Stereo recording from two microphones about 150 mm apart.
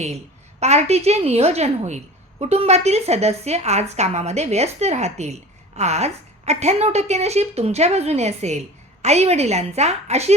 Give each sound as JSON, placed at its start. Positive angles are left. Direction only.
{"t": 0.6, "sound": "a woman's voice", "side_deg": -45}